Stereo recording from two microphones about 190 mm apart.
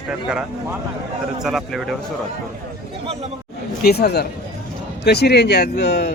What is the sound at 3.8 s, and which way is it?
Speech, 60° left (ahead or behind).